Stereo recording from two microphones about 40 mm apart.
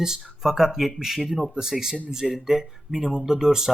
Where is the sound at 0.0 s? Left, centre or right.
Centre.